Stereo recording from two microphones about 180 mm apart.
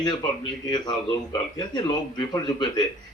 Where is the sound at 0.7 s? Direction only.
25° left (ahead or behind).